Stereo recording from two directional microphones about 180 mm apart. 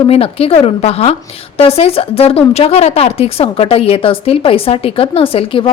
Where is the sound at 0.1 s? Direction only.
30° left (ahead or behind).